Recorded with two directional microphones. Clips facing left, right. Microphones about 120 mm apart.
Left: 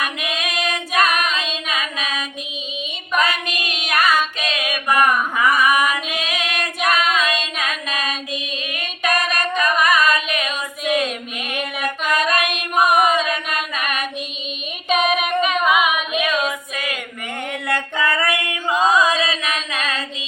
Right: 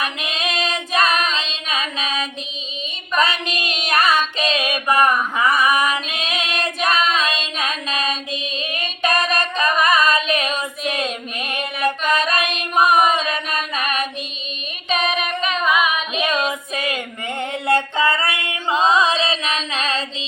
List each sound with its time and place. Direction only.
0.0 s child singing: 25° right (ahead or behind)
4.4 s a sound: 30° right (ahead or behind)
5.9 s child singing: 25° right (ahead or behind)
8.7 s female singing: 30° right (ahead or behind)
11.9 s music: 25° right (ahead or behind)
14.8 s singing: 10° left (ahead or behind)
16.1 s female singing: 25° right (ahead or behind)
17.5 s a sound: 25° right (ahead or behind)